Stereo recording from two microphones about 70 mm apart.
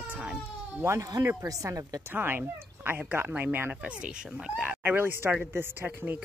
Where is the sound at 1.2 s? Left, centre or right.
Right.